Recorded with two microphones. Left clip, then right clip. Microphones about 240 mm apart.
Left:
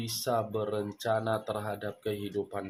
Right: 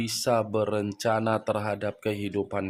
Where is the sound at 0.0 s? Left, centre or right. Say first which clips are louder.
Right 5 dB; right.